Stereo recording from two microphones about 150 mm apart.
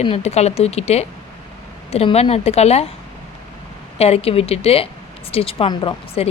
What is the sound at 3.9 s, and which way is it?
Speech, 45° left (ahead or behind).